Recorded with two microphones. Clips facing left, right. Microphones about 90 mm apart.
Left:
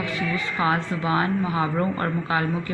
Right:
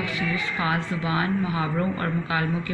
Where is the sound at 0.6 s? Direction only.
35° left (ahead or behind).